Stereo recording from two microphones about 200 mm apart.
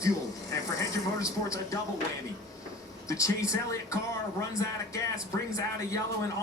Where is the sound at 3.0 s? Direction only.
15° left (ahead or behind).